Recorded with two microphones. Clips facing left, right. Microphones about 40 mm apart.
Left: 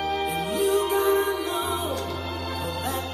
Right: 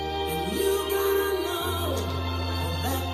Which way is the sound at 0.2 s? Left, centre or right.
Centre.